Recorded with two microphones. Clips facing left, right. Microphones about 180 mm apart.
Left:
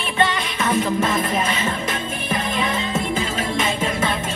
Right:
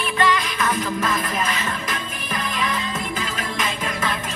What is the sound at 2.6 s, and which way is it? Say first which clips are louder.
Music: left 3 dB; 25° left (ahead or behind).